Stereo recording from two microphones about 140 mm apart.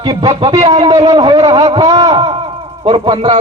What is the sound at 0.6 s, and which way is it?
Speech, 50° right (ahead or behind).